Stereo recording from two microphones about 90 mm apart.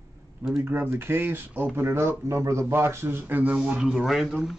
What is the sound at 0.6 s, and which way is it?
Speech, 25° right (ahead or behind).